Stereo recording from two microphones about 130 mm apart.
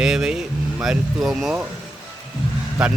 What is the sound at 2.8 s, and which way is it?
Speech, 5° right (ahead or behind).